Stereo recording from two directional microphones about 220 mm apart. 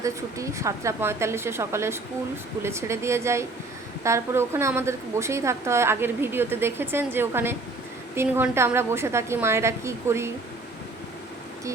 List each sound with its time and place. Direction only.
0.0 s a woman's voice: 15° right (ahead or behind)